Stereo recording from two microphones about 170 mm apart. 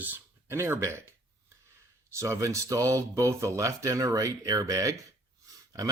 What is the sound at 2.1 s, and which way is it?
Speech, 15° right (ahead or behind).